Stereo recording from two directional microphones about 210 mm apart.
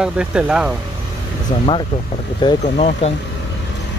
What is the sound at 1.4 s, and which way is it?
Speech, 25° left (ahead or behind).